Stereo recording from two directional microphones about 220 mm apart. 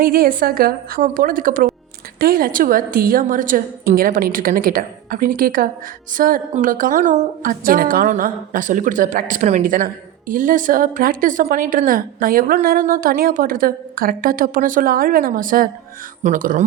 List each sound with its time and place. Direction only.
0.0 s a woman's voice: 40° right (ahead or behind)